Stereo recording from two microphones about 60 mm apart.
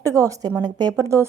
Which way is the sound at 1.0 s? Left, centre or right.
Right.